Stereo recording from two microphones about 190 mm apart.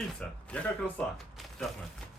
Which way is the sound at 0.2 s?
5° left (ahead or behind).